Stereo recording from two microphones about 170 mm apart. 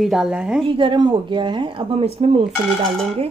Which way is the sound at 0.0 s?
5° right (ahead or behind).